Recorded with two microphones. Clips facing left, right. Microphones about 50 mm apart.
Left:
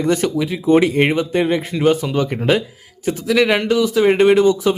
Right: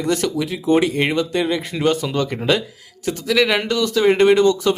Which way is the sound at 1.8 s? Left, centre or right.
Centre.